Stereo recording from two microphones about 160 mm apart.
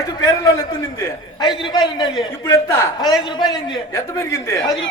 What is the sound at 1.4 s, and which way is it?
A man's voice, 30° left (ahead or behind).